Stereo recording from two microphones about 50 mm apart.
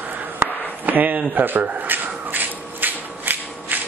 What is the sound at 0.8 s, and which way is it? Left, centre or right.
Speech, right.